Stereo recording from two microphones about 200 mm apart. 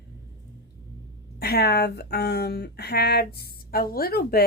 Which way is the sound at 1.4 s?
50° left (ahead or behind).